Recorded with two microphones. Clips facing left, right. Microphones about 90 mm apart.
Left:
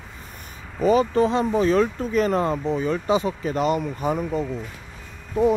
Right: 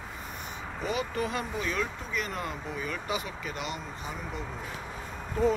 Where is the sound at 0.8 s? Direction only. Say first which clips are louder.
Left 13 dB; 35° left (ahead or behind).